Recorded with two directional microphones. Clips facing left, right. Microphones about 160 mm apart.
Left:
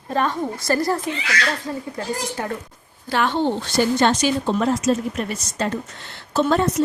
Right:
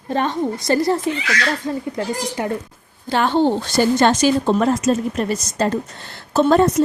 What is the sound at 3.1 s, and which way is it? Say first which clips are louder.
Speech: right 4 dB; 30° right (ahead or behind).